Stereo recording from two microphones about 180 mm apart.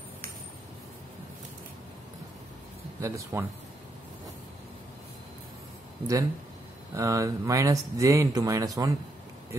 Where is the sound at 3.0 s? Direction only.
15° right (ahead or behind).